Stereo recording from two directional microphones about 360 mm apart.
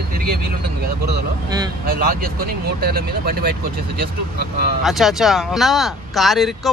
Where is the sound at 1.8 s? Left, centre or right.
Right.